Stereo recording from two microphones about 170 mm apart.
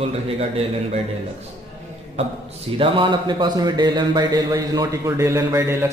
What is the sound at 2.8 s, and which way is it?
A man's voice, 30° right (ahead or behind).